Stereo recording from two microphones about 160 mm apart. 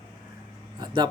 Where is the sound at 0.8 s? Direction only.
30° right (ahead or behind).